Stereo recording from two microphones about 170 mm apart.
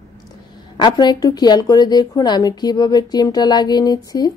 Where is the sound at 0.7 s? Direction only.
25° left (ahead or behind).